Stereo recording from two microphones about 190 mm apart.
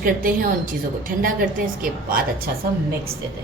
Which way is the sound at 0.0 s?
45° right (ahead or behind).